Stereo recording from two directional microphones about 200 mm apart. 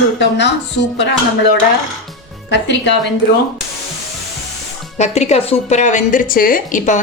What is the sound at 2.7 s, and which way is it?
Speech, 60° left (ahead or behind).